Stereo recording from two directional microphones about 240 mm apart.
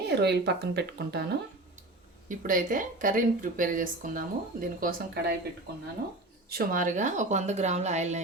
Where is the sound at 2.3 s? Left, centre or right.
Right.